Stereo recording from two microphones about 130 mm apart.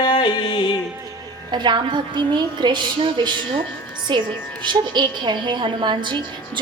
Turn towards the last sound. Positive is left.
turn(degrees=-35)  # may be behind; listen again after turning